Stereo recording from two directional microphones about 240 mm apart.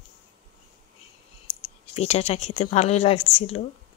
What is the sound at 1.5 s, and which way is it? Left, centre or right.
Speech, left.